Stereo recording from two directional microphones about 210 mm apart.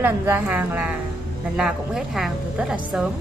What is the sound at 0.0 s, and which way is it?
A woman's voice, 10° right (ahead or behind).